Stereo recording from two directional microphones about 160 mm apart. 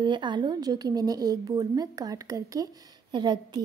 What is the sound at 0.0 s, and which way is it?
A woman's voice, 30° right (ahead or behind).